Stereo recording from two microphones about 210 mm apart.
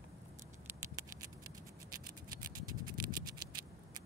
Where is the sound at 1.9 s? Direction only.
15° right (ahead or behind).